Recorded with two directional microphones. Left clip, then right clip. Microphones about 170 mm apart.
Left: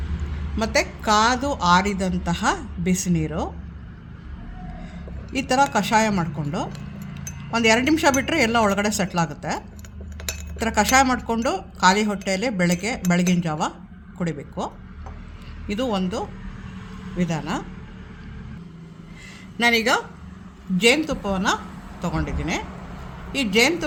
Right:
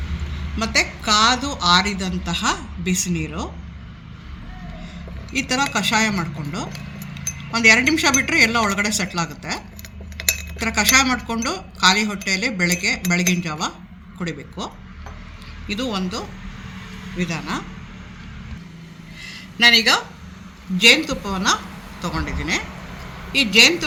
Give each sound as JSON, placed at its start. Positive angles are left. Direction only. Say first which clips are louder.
{"t": 0.5, "sound": "speech", "louder": "right 2 dB", "side_deg": 75}
{"t": 5.3, "sound": "speech", "louder": "left 1 dB", "side_deg": 80}
{"t": 10.6, "sound": "speech", "louder": "even", "side_deg": 90}
{"t": 19.5, "sound": "speech", "louder": "right 5 dB", "side_deg": 90}